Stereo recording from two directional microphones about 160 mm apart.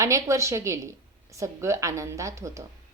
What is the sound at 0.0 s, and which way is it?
A woman's voice, 20° right (ahead or behind).